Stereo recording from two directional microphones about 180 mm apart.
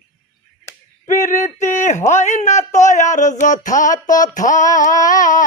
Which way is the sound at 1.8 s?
40° left (ahead or behind).